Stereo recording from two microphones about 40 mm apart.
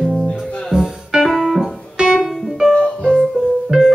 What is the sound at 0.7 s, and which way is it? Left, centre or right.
Music, centre.